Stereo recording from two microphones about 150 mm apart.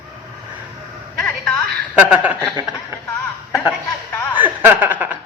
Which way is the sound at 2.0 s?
10° right (ahead or behind).